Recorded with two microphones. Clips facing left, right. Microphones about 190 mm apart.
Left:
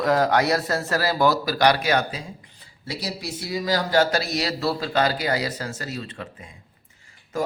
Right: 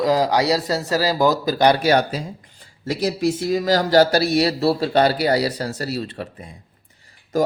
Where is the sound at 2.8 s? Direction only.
50° right (ahead or behind).